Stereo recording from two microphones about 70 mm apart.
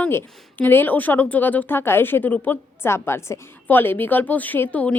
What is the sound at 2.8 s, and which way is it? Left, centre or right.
A woman's voice, left.